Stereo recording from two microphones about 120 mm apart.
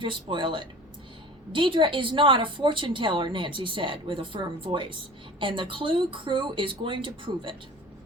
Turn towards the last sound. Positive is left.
turn(degrees=-45)  # may be behind; listen again after turning